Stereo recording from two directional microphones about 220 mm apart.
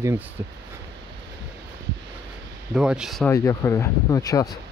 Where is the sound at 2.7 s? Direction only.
5° right (ahead or behind).